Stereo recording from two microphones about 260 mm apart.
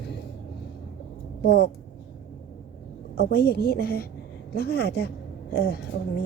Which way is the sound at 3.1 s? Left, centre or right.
Left.